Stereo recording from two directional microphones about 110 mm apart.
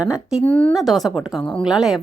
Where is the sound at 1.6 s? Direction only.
5° right (ahead or behind).